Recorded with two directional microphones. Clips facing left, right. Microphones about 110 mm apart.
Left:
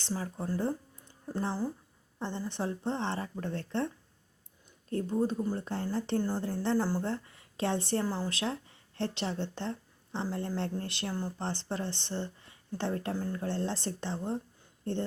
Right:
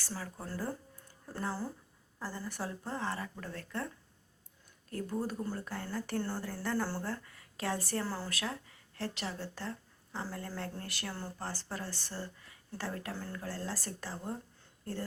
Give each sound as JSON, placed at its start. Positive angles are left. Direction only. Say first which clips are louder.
{"t": 0.0, "sound": "a woman's voice", "louder": "left 7 dB", "side_deg": 20}